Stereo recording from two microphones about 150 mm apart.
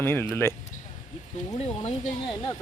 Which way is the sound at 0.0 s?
15° left (ahead or behind).